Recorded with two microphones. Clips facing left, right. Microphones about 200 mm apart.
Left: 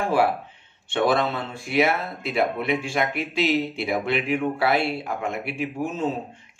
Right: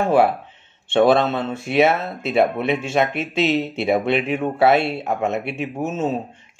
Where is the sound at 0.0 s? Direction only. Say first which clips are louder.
Right 5 dB; 25° right (ahead or behind).